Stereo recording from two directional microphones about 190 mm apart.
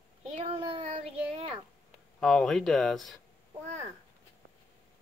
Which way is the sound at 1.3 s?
35° right (ahead or behind).